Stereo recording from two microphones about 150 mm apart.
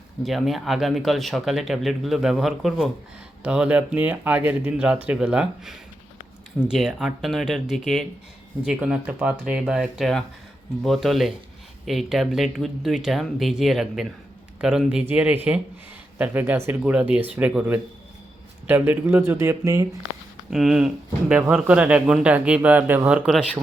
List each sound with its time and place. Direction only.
0.2 s speech: centre (ahead or behind); by 20.0 s 20° right (ahead or behind)
20.5 s speech: 5° right (ahead or behind)